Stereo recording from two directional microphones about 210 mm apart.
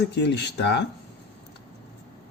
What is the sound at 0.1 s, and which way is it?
Speech, 55° left (ahead or behind).